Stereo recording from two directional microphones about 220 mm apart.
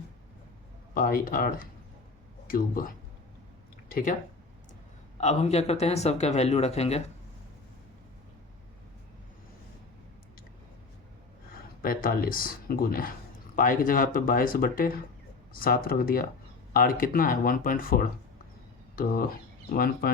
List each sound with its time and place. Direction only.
0.9 s speech: 40° left (ahead or behind)
5.1 s speech: 30° left (ahead or behind)
11.8 s speech: 40° left (ahead or behind)
19.7 s speech: 45° left (ahead or behind)